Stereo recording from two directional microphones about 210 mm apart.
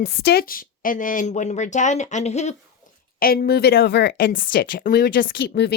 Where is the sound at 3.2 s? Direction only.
45° left (ahead or behind).